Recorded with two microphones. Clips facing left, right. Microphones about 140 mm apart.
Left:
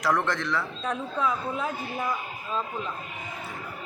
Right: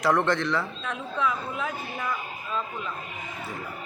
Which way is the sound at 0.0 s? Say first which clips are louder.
Right 3 dB; centre (ahead or behind).